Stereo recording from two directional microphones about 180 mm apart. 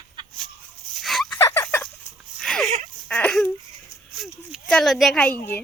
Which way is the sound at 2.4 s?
5° left (ahead or behind).